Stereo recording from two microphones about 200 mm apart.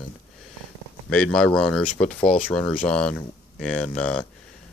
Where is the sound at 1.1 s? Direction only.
5° left (ahead or behind).